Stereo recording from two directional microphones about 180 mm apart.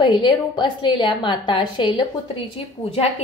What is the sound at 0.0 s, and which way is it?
A woman's voice, 25° left (ahead or behind).